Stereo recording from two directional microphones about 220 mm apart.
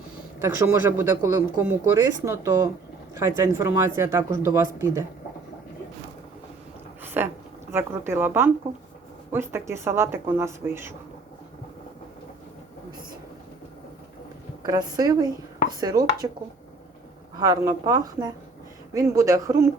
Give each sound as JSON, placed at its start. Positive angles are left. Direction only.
{"t": 0.4, "sound": "speech", "side_deg": -10}
{"t": 7.2, "sound": "a sound", "side_deg": -10}
{"t": 7.7, "sound": "speech", "side_deg": -10}
{"t": 14.6, "sound": "speech", "side_deg": -20}
{"t": 17.4, "sound": "speech", "side_deg": -15}